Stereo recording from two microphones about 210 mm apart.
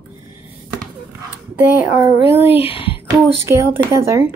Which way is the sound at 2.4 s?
25° left (ahead or behind).